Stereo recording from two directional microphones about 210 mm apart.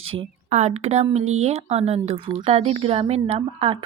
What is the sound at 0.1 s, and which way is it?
Speech, 30° right (ahead or behind).